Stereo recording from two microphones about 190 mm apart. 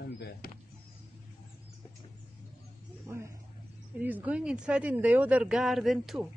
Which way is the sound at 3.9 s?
10° right (ahead or behind).